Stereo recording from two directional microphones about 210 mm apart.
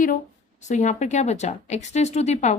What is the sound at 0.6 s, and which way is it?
A woman's voice, 35° left (ahead or behind).